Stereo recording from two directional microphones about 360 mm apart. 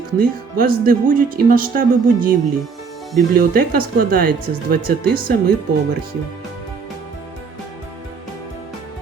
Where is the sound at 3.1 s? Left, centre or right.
Right.